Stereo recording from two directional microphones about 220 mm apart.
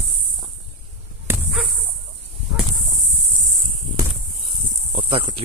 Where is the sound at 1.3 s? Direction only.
10° right (ahead or behind).